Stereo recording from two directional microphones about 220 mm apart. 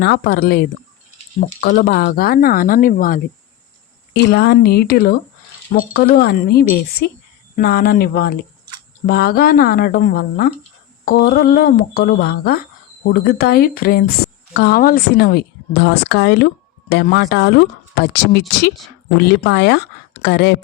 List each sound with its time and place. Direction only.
0.0 s a woman's voice: 45° left (ahead or behind)